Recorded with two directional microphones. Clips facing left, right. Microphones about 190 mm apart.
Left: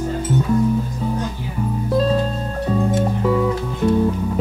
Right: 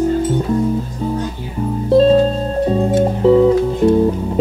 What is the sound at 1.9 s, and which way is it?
Music, 25° right (ahead or behind).